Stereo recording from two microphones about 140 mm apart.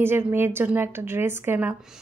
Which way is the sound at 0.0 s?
15° right (ahead or behind).